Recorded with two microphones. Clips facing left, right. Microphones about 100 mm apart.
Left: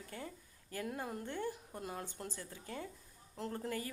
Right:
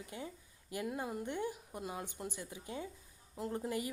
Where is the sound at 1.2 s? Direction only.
15° right (ahead or behind).